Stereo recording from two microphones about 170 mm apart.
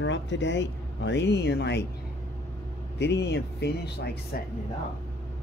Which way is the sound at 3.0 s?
85° left.